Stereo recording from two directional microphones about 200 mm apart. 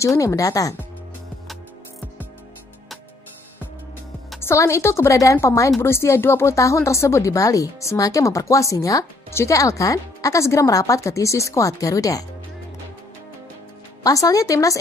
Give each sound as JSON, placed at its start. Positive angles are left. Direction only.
{"t": 0.0, "sound": "speech", "side_deg": 15}
{"t": 4.4, "sound": "speech", "side_deg": 15}
{"t": 14.0, "sound": "speech", "side_deg": 15}